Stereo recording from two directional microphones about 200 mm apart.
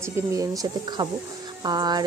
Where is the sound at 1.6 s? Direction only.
20° right (ahead or behind).